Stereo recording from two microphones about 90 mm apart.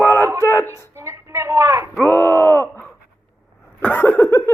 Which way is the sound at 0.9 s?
30° right (ahead or behind).